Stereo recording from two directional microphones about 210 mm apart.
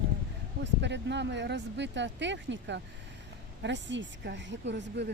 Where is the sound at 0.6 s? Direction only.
55° right (ahead or behind).